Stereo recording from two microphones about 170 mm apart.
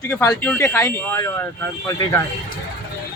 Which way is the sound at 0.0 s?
15° left (ahead or behind).